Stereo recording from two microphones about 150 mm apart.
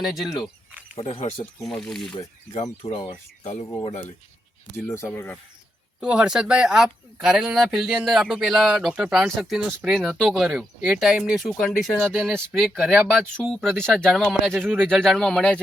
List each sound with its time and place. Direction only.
0.0 s speech: centre (ahead or behind)
0.9 s speech: 40° left (ahead or behind)
1.4 s speech: 5° left (ahead or behind)
2.8 s speech: 35° left (ahead or behind)
4.9 s speech: 15° left (ahead or behind)
6.0 s speech: 5° right (ahead or behind)